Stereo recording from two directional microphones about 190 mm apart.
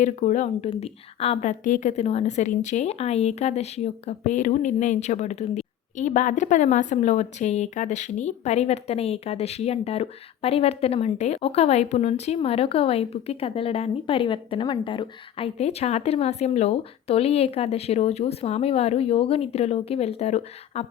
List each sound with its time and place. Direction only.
0.0 s a woman's voice: 40° left (ahead or behind)